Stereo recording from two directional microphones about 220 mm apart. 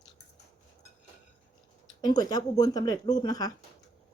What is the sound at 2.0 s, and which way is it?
Speech, 20° left (ahead or behind).